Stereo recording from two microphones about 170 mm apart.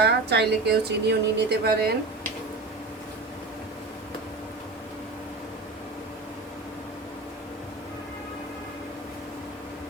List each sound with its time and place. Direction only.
0.0 s a woman's voice: 75° right (ahead or behind)